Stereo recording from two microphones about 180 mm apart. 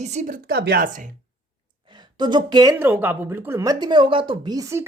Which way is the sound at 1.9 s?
25° right (ahead or behind).